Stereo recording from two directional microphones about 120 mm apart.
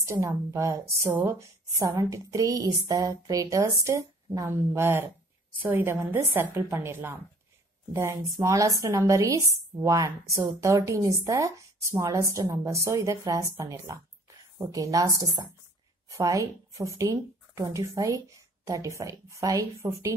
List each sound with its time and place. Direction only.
0.0 s a woman's voice: 25° right (ahead or behind)